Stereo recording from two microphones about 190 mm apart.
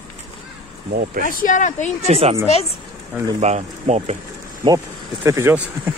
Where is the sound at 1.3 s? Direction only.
45° left (ahead or behind).